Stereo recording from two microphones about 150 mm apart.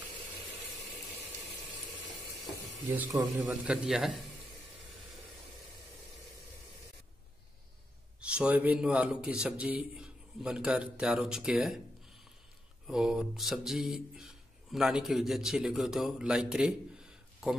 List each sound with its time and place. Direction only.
3.1 s a man's voice: 20° right (ahead or behind)
3.4 s a man's voice: 5° right (ahead or behind)
8.2 s a man's voice: 5° right (ahead or behind)
12.8 s speech: 5° right (ahead or behind)